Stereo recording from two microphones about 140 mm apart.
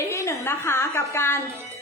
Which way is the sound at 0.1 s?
20° left (ahead or behind).